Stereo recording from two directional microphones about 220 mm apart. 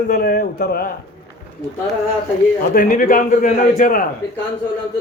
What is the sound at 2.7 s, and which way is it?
A man's voice, 40° left (ahead or behind).